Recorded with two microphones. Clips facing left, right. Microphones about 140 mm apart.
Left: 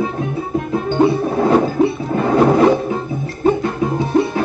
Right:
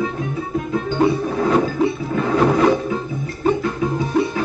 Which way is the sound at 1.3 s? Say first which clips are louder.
Left 3 dB; 30° left (ahead or behind).